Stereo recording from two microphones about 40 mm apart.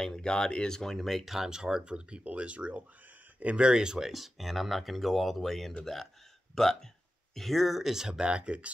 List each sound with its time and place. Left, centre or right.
0.0 s speech: left; by 1.2 s centre
1.2 s speech: centre
4.1 s speech: centre
8.2 s speech: right